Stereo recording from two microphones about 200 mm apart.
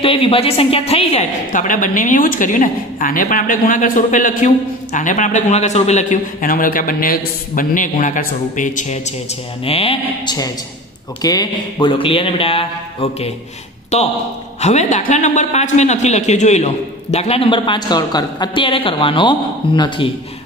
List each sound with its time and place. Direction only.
0.0 s a man's voice: 25° left (ahead or behind)
10.2 s a man's voice: 20° left (ahead or behind)